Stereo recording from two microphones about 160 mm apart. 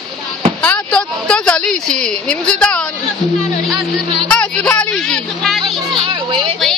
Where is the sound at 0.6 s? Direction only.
10° left (ahead or behind).